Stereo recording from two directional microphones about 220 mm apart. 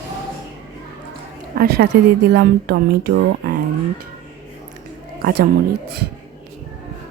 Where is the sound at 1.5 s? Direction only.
45° right (ahead or behind).